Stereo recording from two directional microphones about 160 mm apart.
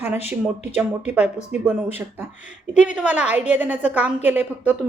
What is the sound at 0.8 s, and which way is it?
A woman's voice, 10° right (ahead or behind).